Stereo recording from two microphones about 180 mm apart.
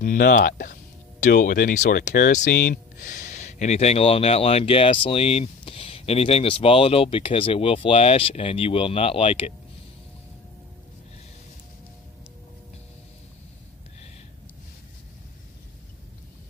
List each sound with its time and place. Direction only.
0.0 s speech: 55° left (ahead or behind); by 9.5 s 30° left (ahead or behind)